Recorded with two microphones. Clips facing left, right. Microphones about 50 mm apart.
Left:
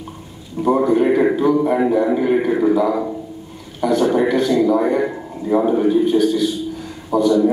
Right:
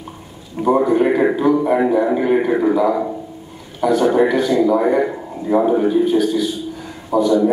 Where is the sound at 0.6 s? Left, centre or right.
Centre.